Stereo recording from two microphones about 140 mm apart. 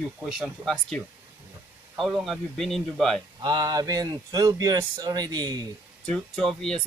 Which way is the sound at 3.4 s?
30° right (ahead or behind).